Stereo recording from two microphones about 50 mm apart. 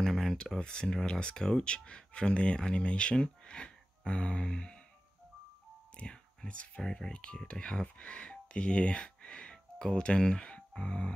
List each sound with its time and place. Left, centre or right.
0.0 s a sound: centre
0.6 s speech: centre
5.9 s speech: centre
6.8 s speech: centre